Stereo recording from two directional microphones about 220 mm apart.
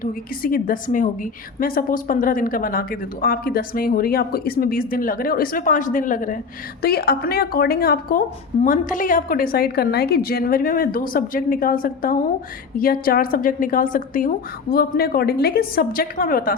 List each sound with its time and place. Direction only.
0.0 s a woman's voice: 40° left (ahead or behind)